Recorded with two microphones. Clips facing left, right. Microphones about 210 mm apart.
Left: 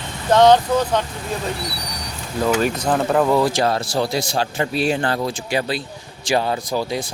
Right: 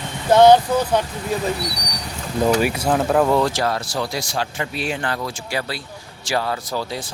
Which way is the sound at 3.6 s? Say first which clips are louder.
Left 3 dB; 25° left (ahead or behind).